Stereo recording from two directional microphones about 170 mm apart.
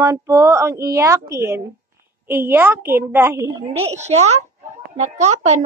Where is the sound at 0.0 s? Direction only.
20° right (ahead or behind).